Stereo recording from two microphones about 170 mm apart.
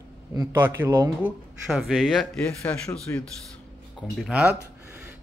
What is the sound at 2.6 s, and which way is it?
Speech, 15° left (ahead or behind).